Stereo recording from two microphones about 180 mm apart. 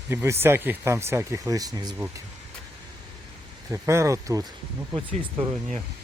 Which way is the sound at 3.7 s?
15° right (ahead or behind).